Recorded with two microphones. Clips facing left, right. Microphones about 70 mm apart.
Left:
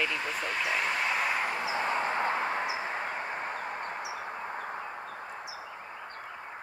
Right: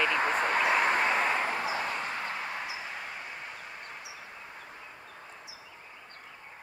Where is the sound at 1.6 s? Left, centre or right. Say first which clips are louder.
Left 3 dB; left.